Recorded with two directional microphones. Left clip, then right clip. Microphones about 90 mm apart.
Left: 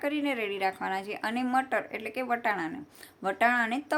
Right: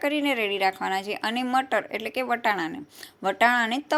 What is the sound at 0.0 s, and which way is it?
A woman's voice, 25° right (ahead or behind).